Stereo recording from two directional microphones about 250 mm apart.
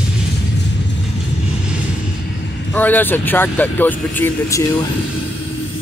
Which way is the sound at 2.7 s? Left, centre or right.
Centre.